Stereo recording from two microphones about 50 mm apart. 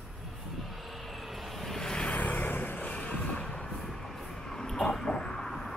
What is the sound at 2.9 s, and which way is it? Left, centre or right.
Vehicle, left.